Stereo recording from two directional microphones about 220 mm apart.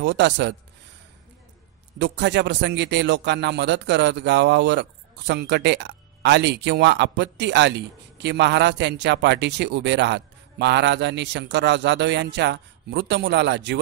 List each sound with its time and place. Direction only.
0.0 s a man's voice: 55° right (ahead or behind)
2.0 s a man's voice: 55° right (ahead or behind)